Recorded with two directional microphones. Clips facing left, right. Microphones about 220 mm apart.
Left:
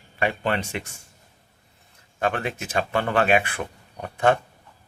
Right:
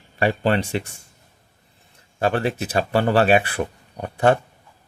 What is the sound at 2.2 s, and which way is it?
A man's voice, 35° right (ahead or behind).